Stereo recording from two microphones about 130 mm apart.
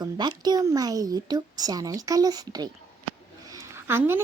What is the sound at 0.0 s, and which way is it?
Speech, 35° right (ahead or behind).